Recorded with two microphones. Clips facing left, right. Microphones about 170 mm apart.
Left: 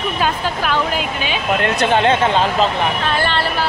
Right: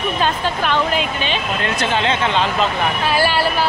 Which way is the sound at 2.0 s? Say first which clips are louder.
Left 3 dB; 45° left (ahead or behind).